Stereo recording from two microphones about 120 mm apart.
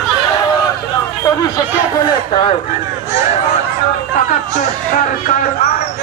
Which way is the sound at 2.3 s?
50° left (ahead or behind).